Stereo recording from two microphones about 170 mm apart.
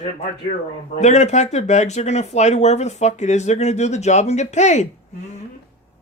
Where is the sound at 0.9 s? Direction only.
40° left (ahead or behind).